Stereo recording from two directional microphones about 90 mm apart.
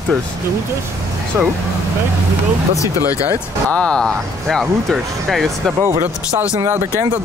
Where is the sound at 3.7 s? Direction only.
10° left (ahead or behind).